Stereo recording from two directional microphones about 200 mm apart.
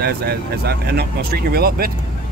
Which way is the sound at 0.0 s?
50° right (ahead or behind).